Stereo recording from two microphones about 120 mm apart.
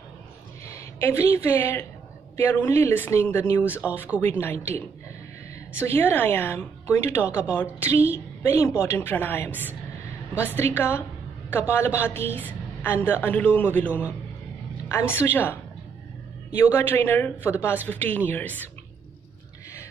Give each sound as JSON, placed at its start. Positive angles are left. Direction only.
{"t": 0.7, "sound": "a woman's voice", "side_deg": 25}